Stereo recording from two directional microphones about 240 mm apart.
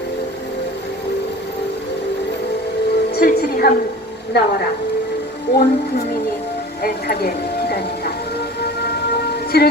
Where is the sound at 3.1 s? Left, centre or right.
Left.